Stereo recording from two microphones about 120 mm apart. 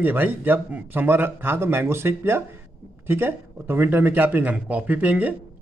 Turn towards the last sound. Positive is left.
turn(degrees=-10)  # may be behind; listen again after turning